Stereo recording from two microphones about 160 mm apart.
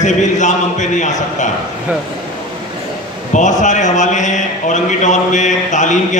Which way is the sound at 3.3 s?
50° left (ahead or behind).